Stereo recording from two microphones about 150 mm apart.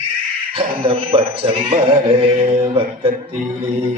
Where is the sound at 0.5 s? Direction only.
40° right (ahead or behind).